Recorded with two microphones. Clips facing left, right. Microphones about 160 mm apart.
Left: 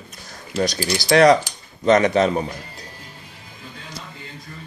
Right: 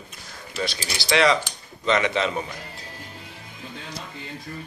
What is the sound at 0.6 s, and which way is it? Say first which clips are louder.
Speech: left 7 dB; 40° left (ahead or behind).